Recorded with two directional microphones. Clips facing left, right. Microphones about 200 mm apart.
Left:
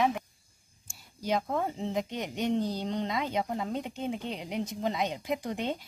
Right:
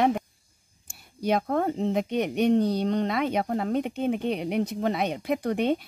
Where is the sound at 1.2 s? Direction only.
60° right (ahead or behind).